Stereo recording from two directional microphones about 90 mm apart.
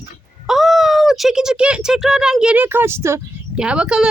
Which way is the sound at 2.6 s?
20° right (ahead or behind).